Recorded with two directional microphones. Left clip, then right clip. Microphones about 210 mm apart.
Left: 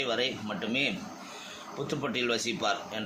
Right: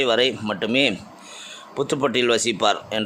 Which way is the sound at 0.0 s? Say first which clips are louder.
Right 11 dB; 55° right (ahead or behind).